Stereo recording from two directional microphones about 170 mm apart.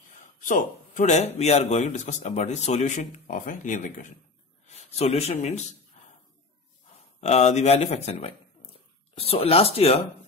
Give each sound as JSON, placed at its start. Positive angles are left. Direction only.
{"t": 0.2, "sound": "a man's voice", "side_deg": 50}
{"t": 6.0, "sound": "a sound", "side_deg": 45}
{"t": 7.2, "sound": "speech", "side_deg": 40}